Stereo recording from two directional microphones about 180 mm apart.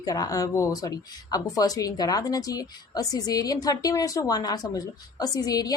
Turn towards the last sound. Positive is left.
turn(degrees=20)  # may be behind; listen again after turning